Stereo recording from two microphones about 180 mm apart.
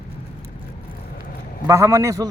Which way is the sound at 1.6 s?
15° right (ahead or behind).